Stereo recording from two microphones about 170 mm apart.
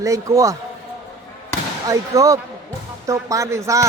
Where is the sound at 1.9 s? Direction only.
20° right (ahead or behind).